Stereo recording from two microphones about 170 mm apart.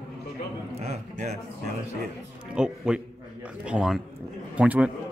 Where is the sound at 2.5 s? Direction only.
5° right (ahead or behind).